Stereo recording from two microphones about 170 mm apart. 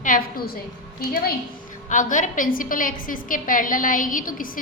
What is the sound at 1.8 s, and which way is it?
A woman's voice, 50° left (ahead or behind).